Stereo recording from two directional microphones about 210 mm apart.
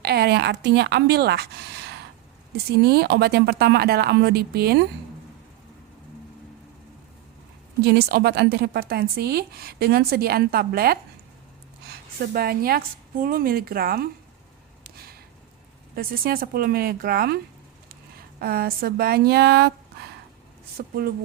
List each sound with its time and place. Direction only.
0.0 s a woman's voice: 50° right (ahead or behind)
7.8 s a woman's voice: 50° right (ahead or behind)
14.8 s a sound: 45° right (ahead or behind)
16.0 s a woman's voice: 45° right (ahead or behind)